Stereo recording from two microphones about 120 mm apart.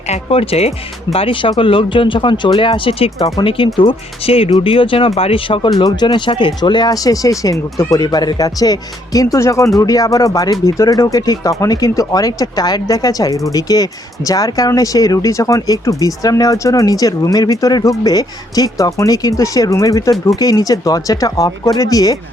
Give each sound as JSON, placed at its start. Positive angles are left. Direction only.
{"t": 0.1, "sound": "speech", "side_deg": 55}